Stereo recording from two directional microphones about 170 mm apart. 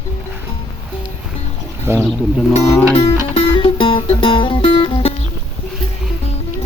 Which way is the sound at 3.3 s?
30° left (ahead or behind).